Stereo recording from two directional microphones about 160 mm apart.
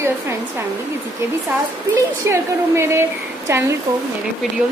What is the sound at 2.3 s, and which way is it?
A woman's voice, 15° right (ahead or behind).